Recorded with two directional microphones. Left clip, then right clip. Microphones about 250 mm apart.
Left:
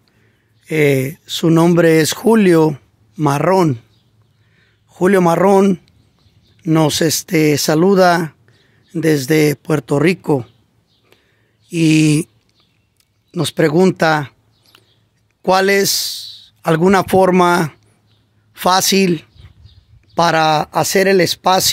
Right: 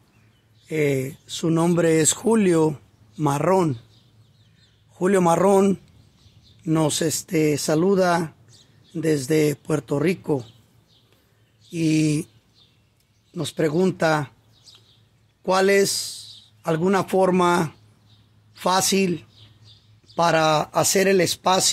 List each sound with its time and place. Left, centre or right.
0.7 s speech: left
4.9 s speech: left
11.7 s speech: left
13.3 s a man's voice: left